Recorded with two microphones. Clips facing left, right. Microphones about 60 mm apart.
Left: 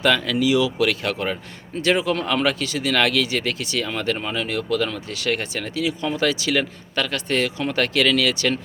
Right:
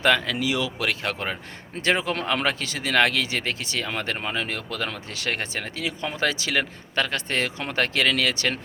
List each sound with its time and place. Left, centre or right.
0.0 s speech: right
0.9 s speech: right